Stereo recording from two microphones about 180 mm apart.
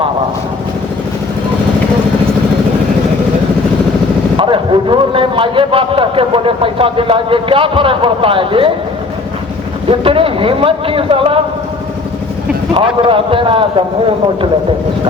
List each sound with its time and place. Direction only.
4.4 s speech: 25° right (ahead or behind)
9.9 s speech: 30° right (ahead or behind)
12.7 s speech: 30° right (ahead or behind)